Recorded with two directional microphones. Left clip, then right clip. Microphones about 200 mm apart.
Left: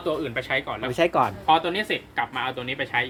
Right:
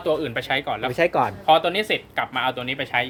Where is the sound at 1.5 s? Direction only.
50° right (ahead or behind).